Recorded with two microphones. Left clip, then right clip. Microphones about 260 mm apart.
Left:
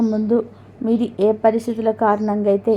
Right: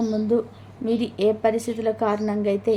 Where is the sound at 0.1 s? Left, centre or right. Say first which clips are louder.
Left 3 dB; centre.